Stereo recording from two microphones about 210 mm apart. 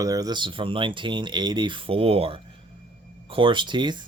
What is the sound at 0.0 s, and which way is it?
Speech, 15° right (ahead or behind).